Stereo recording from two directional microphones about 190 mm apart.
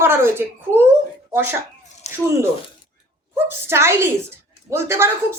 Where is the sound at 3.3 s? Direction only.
15° right (ahead or behind).